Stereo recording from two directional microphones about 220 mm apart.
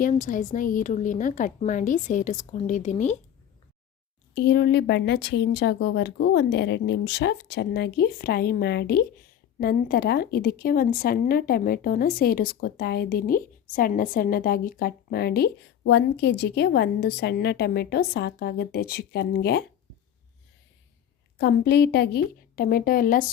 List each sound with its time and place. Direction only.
0.0 s speech: 35° left (ahead or behind)
4.4 s speech: 45° left (ahead or behind)
21.3 s speech: 45° left (ahead or behind)